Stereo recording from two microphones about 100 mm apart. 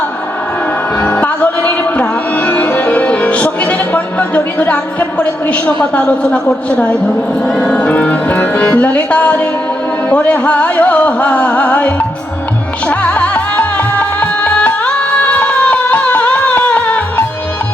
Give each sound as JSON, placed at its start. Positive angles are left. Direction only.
{"t": 0.9, "sound": "music", "side_deg": 15}
{"t": 7.4, "sound": "speech", "side_deg": 5}
{"t": 12.9, "sound": "music", "side_deg": 15}